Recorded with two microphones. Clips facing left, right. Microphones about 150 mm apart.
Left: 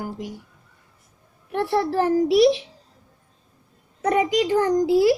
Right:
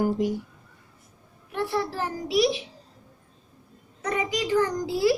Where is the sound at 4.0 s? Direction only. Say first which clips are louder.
Left 7 dB; 55° left (ahead or behind).